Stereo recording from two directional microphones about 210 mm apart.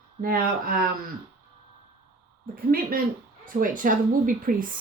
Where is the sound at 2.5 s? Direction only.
45° right (ahead or behind).